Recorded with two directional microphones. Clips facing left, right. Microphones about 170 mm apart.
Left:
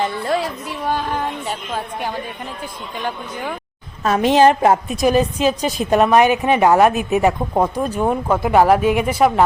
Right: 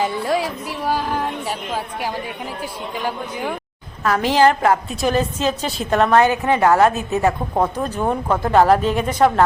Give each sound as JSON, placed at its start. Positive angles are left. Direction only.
{"t": 0.0, "sound": "a woman's voice", "side_deg": -10}
{"t": 4.0, "sound": "a woman's voice", "side_deg": 25}